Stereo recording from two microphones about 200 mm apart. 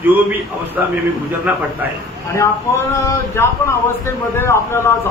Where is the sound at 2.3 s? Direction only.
15° left (ahead or behind).